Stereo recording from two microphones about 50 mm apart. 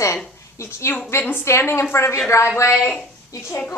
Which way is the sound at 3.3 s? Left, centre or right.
Left.